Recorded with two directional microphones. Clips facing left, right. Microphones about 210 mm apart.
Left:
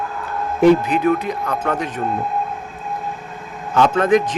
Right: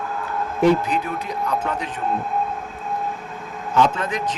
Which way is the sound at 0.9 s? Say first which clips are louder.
Left 7 dB; 55° left (ahead or behind).